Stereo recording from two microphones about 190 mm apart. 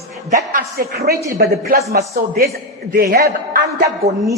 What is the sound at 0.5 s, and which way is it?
A man's voice, 55° right (ahead or behind).